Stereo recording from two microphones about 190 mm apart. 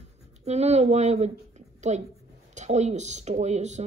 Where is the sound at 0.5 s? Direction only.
35° right (ahead or behind).